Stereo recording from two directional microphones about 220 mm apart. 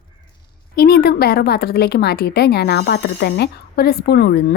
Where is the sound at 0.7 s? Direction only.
45° left (ahead or behind).